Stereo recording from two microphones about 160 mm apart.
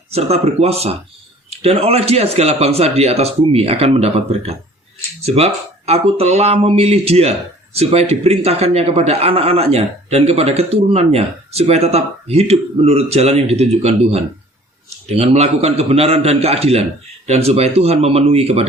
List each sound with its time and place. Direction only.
0.1 s speech: 40° right (ahead or behind)